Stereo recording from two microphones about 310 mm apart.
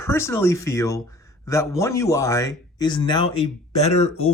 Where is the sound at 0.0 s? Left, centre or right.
Centre.